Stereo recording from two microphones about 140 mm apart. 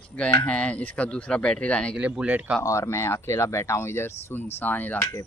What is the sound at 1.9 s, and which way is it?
Speech, 10° right (ahead or behind).